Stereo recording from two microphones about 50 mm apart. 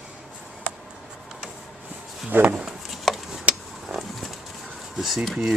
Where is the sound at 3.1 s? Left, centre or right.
Centre.